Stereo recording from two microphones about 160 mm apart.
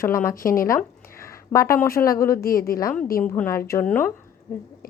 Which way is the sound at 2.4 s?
65° left (ahead or behind).